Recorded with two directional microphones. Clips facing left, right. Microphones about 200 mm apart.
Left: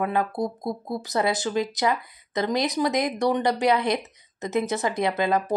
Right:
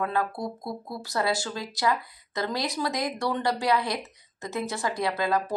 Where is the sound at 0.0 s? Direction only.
20° left (ahead or behind).